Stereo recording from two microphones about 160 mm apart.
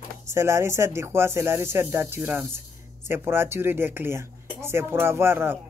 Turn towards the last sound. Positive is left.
turn(degrees=-15)  # may be behind; listen again after turning